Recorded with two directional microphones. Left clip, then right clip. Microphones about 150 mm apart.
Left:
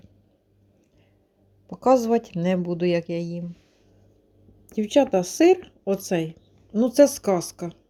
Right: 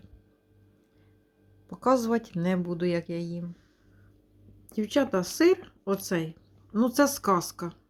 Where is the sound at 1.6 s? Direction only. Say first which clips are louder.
Left 6 dB; 20° left (ahead or behind).